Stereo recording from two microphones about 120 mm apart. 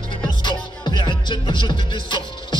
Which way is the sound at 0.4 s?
40° left (ahead or behind).